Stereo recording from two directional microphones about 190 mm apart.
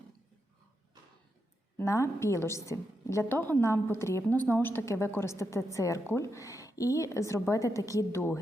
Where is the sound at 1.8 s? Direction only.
15° left (ahead or behind).